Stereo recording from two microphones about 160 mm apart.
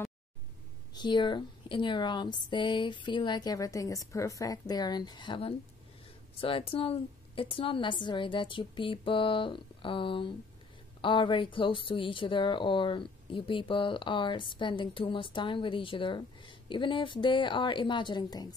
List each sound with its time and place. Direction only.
0.9 s a woman's voice: 30° left (ahead or behind)